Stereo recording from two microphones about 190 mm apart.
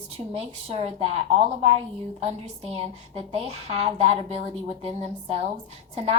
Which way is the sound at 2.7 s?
30° right (ahead or behind).